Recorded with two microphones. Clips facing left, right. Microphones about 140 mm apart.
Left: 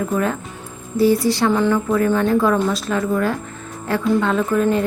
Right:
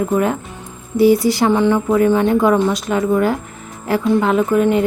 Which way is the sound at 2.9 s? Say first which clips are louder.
Right 5 dB; 25° right (ahead or behind).